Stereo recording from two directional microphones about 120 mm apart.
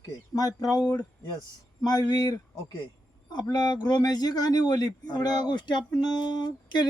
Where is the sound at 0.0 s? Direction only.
30° left (ahead or behind).